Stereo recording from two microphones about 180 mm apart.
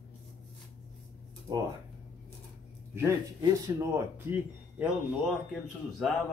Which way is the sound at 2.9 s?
15° right (ahead or behind).